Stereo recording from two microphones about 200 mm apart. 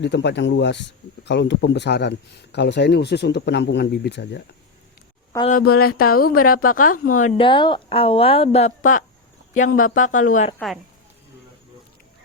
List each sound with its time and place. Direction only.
0.0 s speech: 60° left (ahead or behind)
5.5 s a woman's voice: 45° left (ahead or behind)
7.3 s a woman's voice: 25° left (ahead or behind)